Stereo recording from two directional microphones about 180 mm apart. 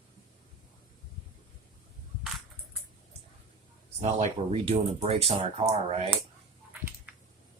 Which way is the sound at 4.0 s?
40° right (ahead or behind).